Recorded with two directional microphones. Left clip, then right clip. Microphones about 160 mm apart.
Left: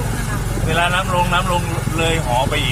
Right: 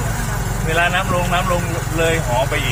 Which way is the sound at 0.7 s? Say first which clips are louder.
Even; 20° left (ahead or behind).